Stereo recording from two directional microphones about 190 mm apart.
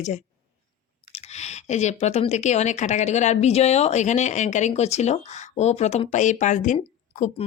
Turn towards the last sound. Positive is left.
turn(degrees=40)  # may be behind; listen again after turning